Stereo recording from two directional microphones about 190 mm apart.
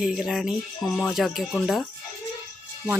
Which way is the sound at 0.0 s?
Centre (ahead or behind).